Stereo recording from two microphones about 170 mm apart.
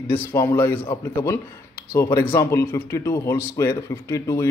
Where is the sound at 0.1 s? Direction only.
15° left (ahead or behind).